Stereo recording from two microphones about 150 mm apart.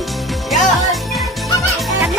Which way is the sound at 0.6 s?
Centre (ahead or behind).